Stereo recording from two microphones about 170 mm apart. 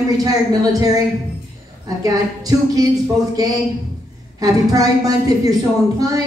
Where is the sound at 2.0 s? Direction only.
20° right (ahead or behind).